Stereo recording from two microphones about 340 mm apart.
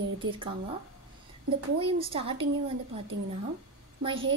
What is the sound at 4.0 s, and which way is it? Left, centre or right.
Speech, centre.